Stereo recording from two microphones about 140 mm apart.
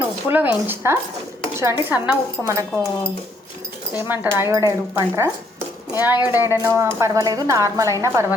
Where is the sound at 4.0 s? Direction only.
10° right (ahead or behind).